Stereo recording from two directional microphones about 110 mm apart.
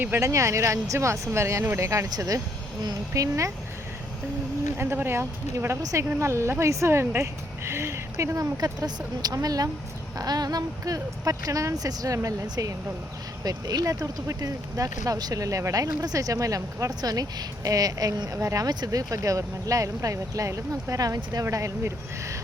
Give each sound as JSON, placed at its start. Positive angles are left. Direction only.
{"t": 0.0, "sound": "speech", "side_deg": -25}
{"t": 4.8, "sound": "speech", "side_deg": -20}